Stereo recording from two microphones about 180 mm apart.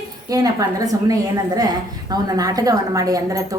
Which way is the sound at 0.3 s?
20° right (ahead or behind).